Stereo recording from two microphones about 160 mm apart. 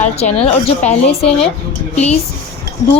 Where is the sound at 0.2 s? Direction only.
40° left (ahead or behind).